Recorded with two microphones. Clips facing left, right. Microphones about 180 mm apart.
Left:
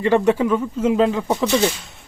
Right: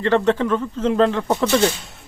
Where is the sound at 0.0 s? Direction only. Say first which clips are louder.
Left 1 dB; 10° left (ahead or behind).